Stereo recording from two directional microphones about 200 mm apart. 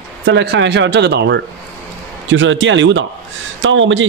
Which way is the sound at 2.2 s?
70° right (ahead or behind).